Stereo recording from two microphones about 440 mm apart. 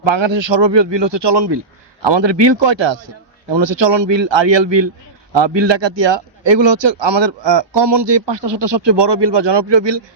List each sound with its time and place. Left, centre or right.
0.0 s a man's voice: right